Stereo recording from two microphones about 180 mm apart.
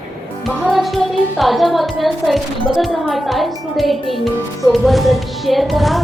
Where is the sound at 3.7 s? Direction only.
Centre (ahead or behind).